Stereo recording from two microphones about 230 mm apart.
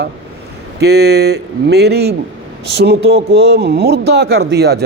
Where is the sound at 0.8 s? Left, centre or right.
Right.